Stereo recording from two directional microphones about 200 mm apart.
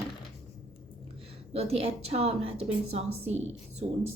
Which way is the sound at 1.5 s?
30° right (ahead or behind).